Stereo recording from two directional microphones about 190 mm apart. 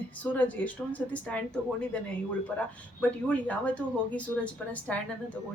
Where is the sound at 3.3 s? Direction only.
5° left (ahead or behind).